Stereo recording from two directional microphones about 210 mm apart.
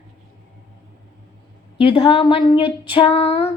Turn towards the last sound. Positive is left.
turn(degrees=30)  # may be behind; listen again after turning